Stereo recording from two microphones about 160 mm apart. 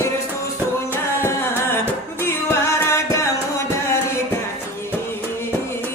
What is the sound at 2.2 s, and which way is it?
Music, 15° left (ahead or behind).